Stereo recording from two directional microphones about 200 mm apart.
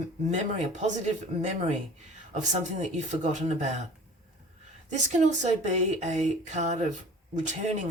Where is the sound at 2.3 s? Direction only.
35° right (ahead or behind).